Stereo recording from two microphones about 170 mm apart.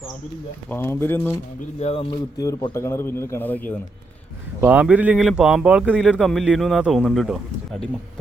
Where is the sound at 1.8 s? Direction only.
35° left (ahead or behind).